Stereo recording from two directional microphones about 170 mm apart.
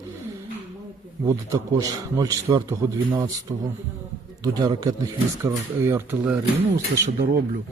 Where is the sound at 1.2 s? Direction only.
20° right (ahead or behind).